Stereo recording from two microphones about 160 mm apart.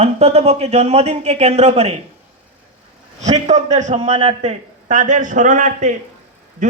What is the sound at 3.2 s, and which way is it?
A man's voice, 45° right (ahead or behind).